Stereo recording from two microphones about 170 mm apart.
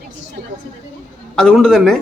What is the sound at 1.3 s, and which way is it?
Speech, 5° left (ahead or behind).